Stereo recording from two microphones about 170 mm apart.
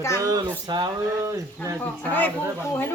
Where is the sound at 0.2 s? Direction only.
20° right (ahead or behind).